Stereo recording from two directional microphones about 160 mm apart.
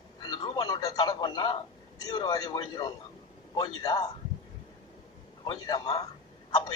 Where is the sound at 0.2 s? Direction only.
25° left (ahead or behind).